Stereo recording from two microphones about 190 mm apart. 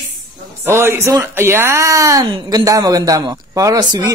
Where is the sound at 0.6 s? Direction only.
15° right (ahead or behind).